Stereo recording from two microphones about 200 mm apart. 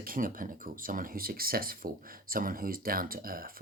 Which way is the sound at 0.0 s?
45° right (ahead or behind).